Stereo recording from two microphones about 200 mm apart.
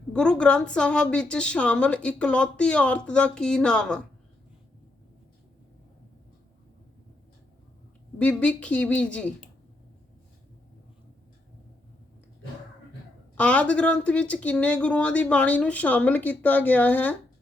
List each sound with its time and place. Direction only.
0.1 s a woman's voice: 5° left (ahead or behind)
8.2 s a woman's voice: 5° left (ahead or behind)
13.3 s speech: 5° left (ahead or behind)